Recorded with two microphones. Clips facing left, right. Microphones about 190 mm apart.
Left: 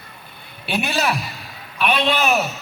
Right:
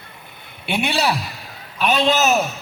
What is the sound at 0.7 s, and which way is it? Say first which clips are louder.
Speech: right 1 dB; 25° right (ahead or behind).